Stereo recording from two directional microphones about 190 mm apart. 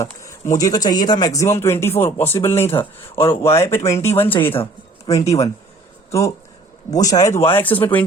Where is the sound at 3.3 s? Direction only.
15° left (ahead or behind).